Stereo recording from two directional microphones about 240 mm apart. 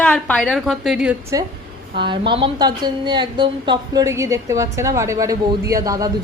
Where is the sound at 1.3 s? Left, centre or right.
Centre.